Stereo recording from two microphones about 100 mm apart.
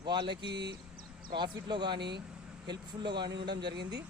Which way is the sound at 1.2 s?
50° right (ahead or behind).